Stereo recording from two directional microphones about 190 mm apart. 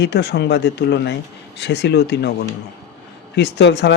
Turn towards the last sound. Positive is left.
turn(degrees=65)  # may be behind; listen again after turning